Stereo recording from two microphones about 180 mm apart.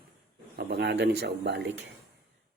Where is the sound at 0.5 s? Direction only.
75° right (ahead or behind).